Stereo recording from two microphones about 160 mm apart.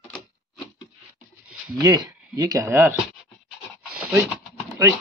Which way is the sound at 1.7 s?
25° right (ahead or behind).